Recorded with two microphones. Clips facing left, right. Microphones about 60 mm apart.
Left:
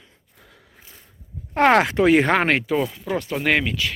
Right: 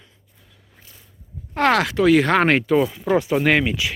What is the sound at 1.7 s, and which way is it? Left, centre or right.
Speech, left.